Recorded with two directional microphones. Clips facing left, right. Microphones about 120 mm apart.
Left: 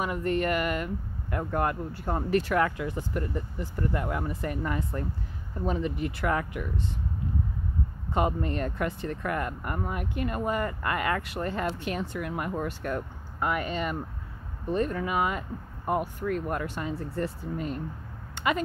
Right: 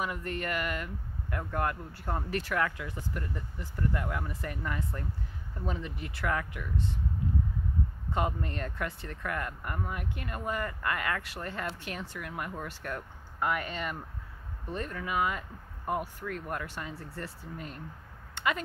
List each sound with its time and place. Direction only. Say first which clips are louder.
0.1 s speech: left 8 dB; 20° left (ahead or behind)
8.1 s speech: left 5 dB; 20° left (ahead or behind)
9.8 s speech: left 4 dB; 30° left (ahead or behind)
10.1 s speech: left 8 dB; 20° left (ahead or behind)
18.3 s a sound: left 3 dB; 15° left (ahead or behind)